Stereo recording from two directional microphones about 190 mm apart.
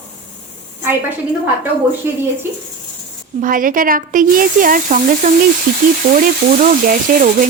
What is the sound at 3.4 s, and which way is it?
Speech, 45° right (ahead or behind).